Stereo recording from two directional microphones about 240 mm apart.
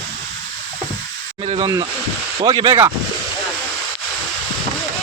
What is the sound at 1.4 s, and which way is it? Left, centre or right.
Speech, right.